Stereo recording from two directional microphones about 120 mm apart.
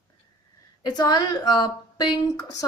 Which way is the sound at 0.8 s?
35° left (ahead or behind).